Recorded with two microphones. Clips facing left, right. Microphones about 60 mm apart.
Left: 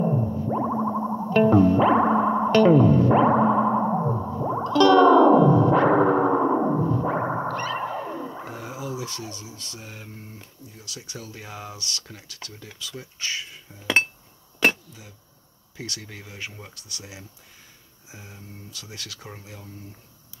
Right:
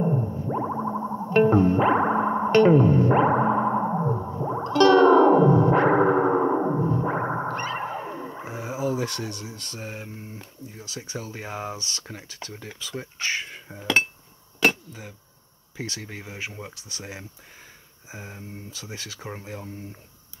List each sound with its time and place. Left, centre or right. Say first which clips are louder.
0.0 s a sound: left 1 dB; centre
1.0 s music: left 2 dB; centre
1.3 s music: left 1 dB; right
2.5 s music: even; right
3.7 s music: left 1 dB; centre
4.6 s music: left 1 dB; right
6.5 s a sound: left 1 dB; centre
6.8 s music: left 1 dB; right
7.4 s effects unit: left 1 dB; right
8.5 s a sound: right 3 dB; centre
8.8 s speech: right 8 dB; right
14.9 s speech: right 5 dB; right
15.8 s speech: right 3 dB; right
17.0 s speech: right 7 dB; right